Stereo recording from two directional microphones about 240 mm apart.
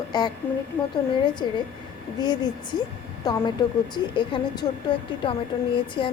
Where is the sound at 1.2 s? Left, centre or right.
Centre.